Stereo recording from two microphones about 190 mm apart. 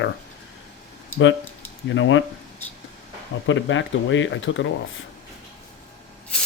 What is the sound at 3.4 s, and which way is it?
Speech, 80° left.